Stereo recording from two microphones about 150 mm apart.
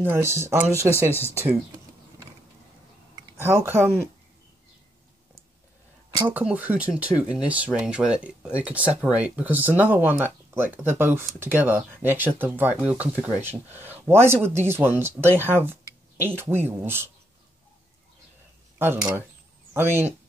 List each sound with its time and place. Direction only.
0.0 s speech: 15° right (ahead or behind)
3.3 s speech: 15° right (ahead or behind)
6.2 s speech: 10° right (ahead or behind)
18.8 s speech: 15° right (ahead or behind)